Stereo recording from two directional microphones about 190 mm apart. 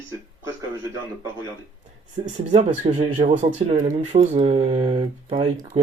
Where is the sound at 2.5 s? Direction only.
40° right (ahead or behind).